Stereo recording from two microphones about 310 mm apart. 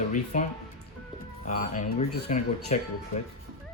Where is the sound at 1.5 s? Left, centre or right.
Left.